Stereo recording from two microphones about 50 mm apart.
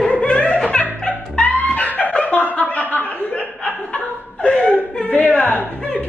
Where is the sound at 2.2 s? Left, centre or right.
Left.